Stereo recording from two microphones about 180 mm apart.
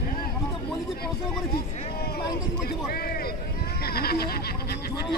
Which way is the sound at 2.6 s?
60° left (ahead or behind).